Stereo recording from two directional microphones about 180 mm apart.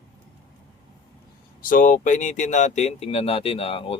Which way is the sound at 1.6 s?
50° left (ahead or behind).